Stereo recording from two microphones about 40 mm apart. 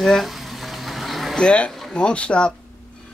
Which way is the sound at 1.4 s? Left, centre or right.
Left.